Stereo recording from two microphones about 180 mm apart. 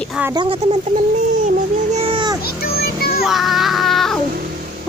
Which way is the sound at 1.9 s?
30° right (ahead or behind).